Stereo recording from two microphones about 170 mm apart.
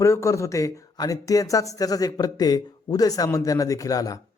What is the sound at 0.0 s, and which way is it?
Speech, 15° left (ahead or behind).